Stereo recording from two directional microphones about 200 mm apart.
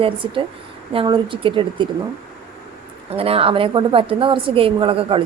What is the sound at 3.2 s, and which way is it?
Speech, 30° right (ahead or behind).